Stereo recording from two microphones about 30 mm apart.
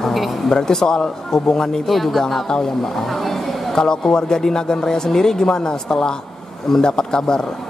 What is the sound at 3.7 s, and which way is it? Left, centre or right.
Speech, left.